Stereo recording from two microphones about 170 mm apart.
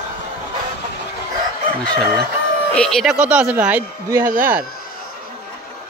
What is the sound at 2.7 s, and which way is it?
Speech, 5° left (ahead or behind).